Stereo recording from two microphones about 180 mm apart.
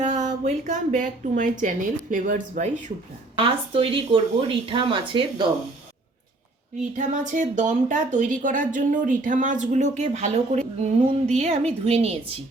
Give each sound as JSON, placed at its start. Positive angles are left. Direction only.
{"t": 0.0, "sound": "a woman's voice", "side_deg": -45}
{"t": 3.3, "sound": "speech", "side_deg": -30}
{"t": 6.9, "sound": "a woman's voice", "side_deg": -45}